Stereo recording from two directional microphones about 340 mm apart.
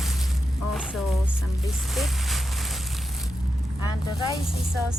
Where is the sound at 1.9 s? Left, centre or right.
Centre.